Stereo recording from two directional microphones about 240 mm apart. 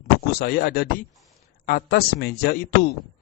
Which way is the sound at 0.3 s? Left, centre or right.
Left.